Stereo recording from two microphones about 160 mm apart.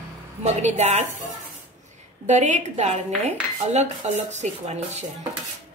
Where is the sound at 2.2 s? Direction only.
50° right (ahead or behind).